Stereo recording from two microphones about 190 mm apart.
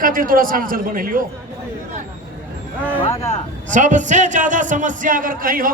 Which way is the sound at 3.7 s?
40° right (ahead or behind).